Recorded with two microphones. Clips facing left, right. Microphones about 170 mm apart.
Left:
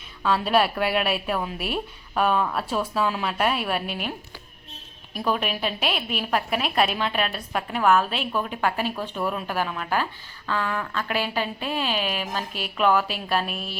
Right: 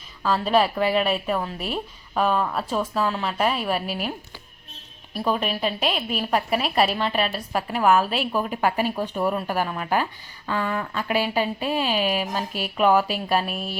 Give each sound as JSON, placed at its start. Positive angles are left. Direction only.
{"t": 0.2, "sound": "a woman's voice", "side_deg": 0}
{"t": 5.2, "sound": "a woman's voice", "side_deg": 0}
{"t": 13.5, "sound": "speech", "side_deg": -40}